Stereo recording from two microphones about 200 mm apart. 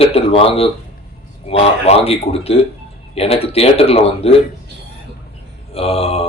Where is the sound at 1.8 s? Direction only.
30° left (ahead or behind).